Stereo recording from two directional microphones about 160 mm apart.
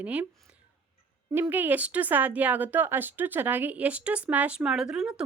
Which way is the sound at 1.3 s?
10° right (ahead or behind).